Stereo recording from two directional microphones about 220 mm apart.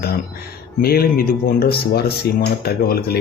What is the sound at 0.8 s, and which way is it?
Speech, 45° left (ahead or behind).